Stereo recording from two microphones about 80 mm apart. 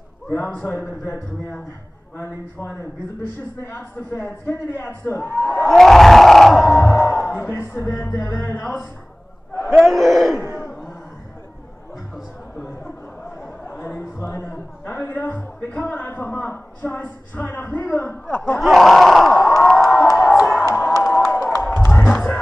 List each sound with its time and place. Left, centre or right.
0.4 s a man's voice: centre
0.7 s a man's voice: left
5.7 s crowd: centre
6.7 s music: left
8.3 s a man's voice: left
9.7 s speech: centre
13.7 s a sound: left
18.6 s crowd: centre
19.9 s crowd: left
20.6 s a sound: left
21.3 s crowd: left
21.6 s music: left
22.1 s music: centre